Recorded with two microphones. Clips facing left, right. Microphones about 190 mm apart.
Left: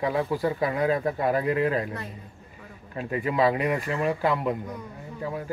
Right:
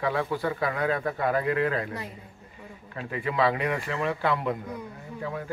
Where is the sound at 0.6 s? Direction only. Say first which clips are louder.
Left 3 dB; 20° left (ahead or behind).